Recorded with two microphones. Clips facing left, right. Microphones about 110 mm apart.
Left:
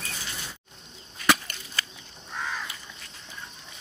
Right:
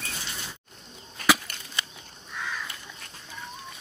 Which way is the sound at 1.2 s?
50° right (ahead or behind).